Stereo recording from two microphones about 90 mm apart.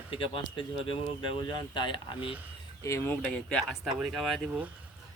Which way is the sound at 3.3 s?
10° left (ahead or behind).